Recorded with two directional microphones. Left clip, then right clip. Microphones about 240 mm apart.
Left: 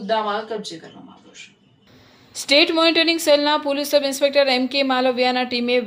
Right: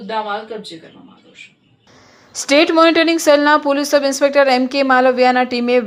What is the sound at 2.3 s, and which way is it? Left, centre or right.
A woman's voice, right.